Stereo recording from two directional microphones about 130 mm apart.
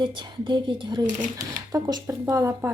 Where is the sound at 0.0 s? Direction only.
40° right (ahead or behind).